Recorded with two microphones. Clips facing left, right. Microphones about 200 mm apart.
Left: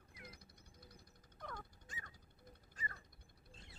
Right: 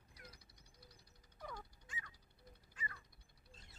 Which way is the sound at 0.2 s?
50° left (ahead or behind).